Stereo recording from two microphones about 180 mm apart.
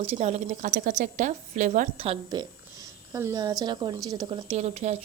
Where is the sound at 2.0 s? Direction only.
30° right (ahead or behind).